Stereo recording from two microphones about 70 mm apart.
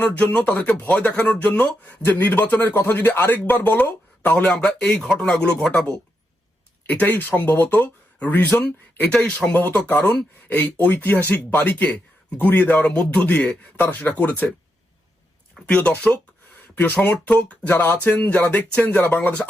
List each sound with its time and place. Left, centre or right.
0.0 s speech: centre
2.0 s speech: left
4.6 s speech: centre
9.5 s speech: left
15.6 s speech: centre